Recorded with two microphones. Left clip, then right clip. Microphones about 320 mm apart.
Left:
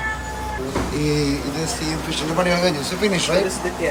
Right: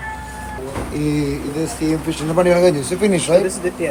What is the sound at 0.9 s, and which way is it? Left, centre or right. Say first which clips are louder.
Speech: right 2 dB; centre.